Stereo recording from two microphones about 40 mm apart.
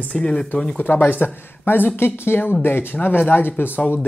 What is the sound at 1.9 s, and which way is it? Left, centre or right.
Speech, left.